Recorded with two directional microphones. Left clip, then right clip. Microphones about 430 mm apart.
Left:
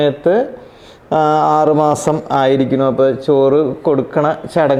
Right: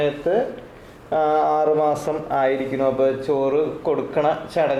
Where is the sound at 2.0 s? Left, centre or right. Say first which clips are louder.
Left 7 dB; left.